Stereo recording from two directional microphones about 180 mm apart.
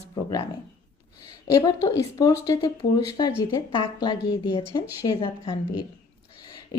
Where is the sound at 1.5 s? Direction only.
20° left (ahead or behind).